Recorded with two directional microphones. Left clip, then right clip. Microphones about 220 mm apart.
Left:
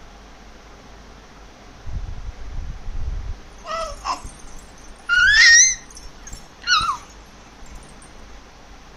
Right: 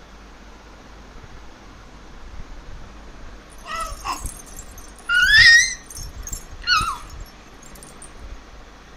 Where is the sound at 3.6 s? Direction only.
15° left (ahead or behind).